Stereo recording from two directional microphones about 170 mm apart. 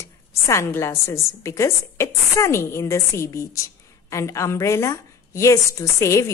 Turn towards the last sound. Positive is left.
turn(degrees=15)  # may be behind; listen again after turning